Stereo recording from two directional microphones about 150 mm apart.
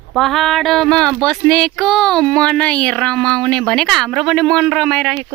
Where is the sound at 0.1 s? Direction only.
Centre (ahead or behind).